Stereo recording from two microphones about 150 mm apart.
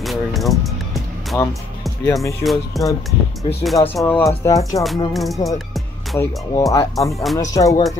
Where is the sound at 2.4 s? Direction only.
Centre (ahead or behind).